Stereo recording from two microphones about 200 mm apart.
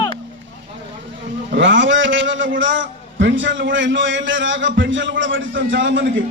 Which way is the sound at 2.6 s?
70° right (ahead or behind).